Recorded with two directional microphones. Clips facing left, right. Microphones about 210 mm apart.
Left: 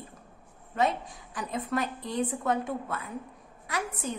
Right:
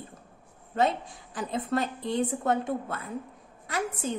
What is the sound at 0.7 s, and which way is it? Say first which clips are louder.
A woman's voice: right 2 dB; 30° right (ahead or behind).